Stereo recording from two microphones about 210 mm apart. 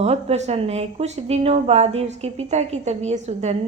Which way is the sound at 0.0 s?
30° right (ahead or behind).